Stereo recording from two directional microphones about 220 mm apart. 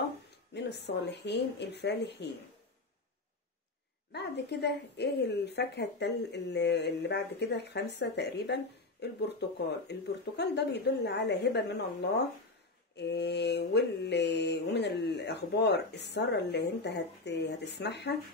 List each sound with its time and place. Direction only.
0.6 s mantra: 50° left (ahead or behind)
4.1 s mantra: 50° left (ahead or behind)